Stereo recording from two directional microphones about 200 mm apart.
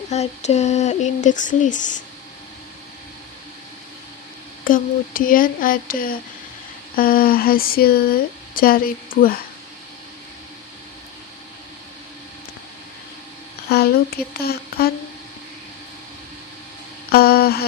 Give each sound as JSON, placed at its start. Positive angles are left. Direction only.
{"t": 0.1, "sound": "female singing", "side_deg": 35}
{"t": 4.6, "sound": "speech", "side_deg": 45}
{"t": 13.7, "sound": "a sound", "side_deg": 50}
{"t": 14.4, "sound": "speech", "side_deg": 50}
{"t": 17.1, "sound": "mantra", "side_deg": 50}